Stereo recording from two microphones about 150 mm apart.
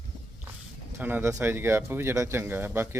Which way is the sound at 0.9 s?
15° right (ahead or behind).